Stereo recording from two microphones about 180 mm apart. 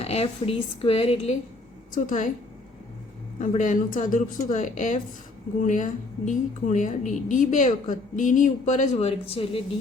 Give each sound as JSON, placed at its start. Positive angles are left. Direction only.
{"t": 0.0, "sound": "a woman's voice", "side_deg": 35}
{"t": 1.9, "sound": "a woman's voice", "side_deg": 45}
{"t": 3.4, "sound": "a woman's voice", "side_deg": 45}